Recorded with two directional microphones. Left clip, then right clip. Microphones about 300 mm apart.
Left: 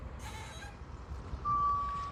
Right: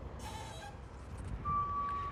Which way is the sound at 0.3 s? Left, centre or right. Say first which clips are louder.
Even; right.